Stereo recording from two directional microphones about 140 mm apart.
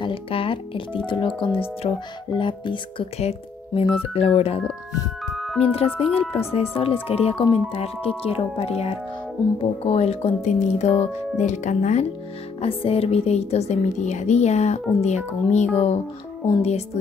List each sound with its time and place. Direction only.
0.0 s speech: 40° left (ahead or behind)
5.2 s music: centre (ahead or behind)
5.6 s speech: 45° left (ahead or behind)
12.5 s speech: 45° left (ahead or behind)